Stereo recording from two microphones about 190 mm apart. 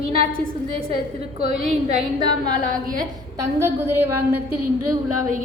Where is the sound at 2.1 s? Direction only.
20° right (ahead or behind).